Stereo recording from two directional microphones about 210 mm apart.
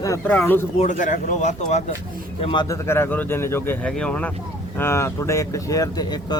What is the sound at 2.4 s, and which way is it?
Speech, 20° left (ahead or behind).